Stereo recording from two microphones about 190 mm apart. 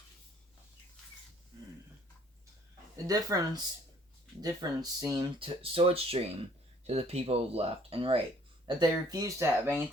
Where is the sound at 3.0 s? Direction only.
20° right (ahead or behind).